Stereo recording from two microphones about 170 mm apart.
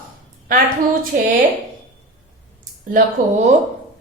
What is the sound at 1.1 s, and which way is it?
Speech, 55° right (ahead or behind).